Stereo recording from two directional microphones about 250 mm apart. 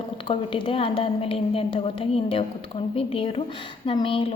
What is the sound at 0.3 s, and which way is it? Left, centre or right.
A woman's voice, left.